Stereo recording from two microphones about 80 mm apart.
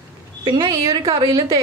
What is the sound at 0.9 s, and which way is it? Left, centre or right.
Speech, right.